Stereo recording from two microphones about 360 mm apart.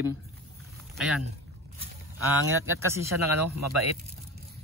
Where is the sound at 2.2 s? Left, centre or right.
Right.